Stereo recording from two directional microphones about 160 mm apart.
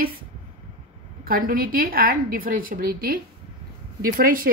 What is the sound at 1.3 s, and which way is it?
Speech, 65° right (ahead or behind).